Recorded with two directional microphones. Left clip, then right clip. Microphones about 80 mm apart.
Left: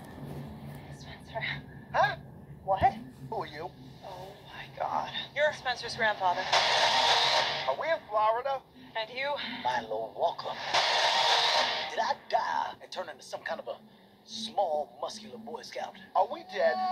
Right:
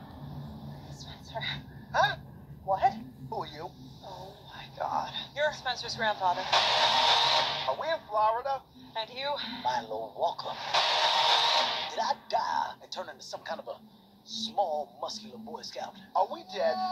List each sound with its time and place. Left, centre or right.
1.3 s a sound: centre
6.3 s speech: left
7.6 s a sound: centre
9.2 s speech: centre
10.6 s wheeze: left
12.3 s music: centre
14.5 s speech: centre